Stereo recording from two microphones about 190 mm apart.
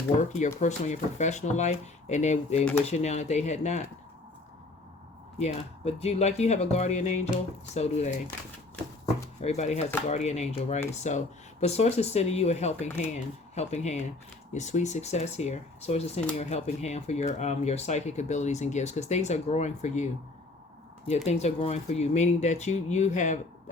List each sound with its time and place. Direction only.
0.2 s speech: 40° left (ahead or behind)
5.4 s speech: 35° left (ahead or behind)
9.4 s speech: 35° left (ahead or behind)
21.2 s speech: 35° left (ahead or behind)